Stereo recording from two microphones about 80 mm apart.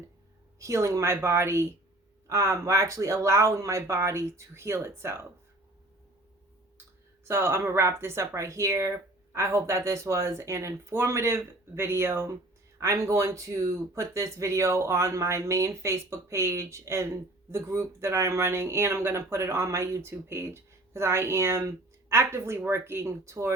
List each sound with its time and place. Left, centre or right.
0.6 s speech: right
7.3 s speech: right